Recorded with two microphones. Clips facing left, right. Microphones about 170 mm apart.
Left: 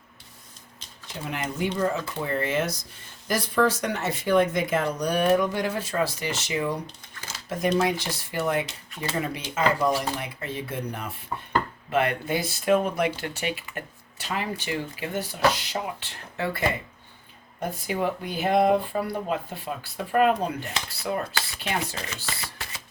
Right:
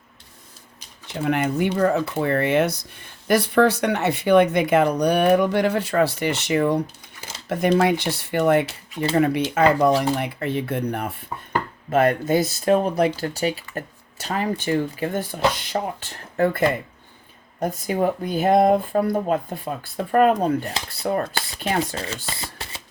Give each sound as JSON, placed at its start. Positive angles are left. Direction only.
{"t": 1.2, "sound": "speech", "side_deg": -60}
{"t": 11.9, "sound": "speech", "side_deg": -45}
{"t": 21.9, "sound": "speech", "side_deg": -30}